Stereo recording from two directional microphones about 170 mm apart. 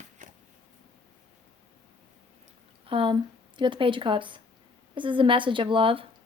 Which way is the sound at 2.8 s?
30° right (ahead or behind).